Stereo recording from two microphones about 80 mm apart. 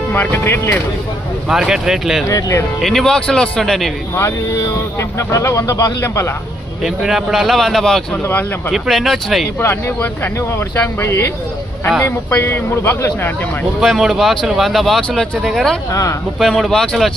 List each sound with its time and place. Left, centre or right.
0.1 s speech: left
1.5 s speech: centre
2.2 s speech: left
2.8 s speech: centre
4.1 s speech: left
6.8 s speech: centre
8.2 s speech: left
8.7 s speech: centre
9.6 s speech: left
14.1 s speech: centre
15.9 s speech: left
16.4 s speech: centre